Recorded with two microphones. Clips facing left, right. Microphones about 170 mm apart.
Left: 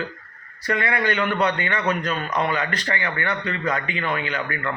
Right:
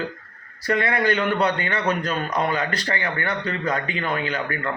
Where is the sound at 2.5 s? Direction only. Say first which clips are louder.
Right 1 dB; 35° right (ahead or behind).